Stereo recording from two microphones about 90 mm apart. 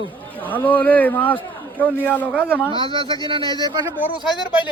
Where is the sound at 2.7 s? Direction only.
70° right (ahead or behind).